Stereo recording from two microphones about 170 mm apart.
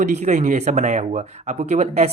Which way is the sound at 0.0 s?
45° right (ahead or behind).